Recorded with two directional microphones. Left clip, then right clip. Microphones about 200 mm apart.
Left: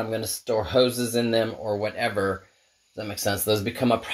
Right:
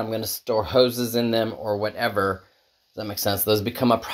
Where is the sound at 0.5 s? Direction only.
10° right (ahead or behind).